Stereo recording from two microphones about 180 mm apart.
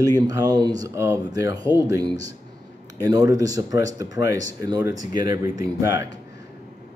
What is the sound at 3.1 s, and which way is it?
Speech, 20° right (ahead or behind).